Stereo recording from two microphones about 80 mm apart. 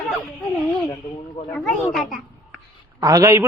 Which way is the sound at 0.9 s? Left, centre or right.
Left.